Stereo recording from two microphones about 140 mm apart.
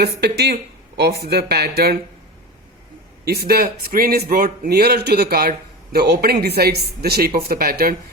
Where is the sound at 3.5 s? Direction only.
90° right.